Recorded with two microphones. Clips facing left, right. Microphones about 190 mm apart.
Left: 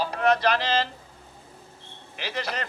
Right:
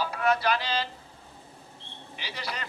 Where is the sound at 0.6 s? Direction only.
90° left.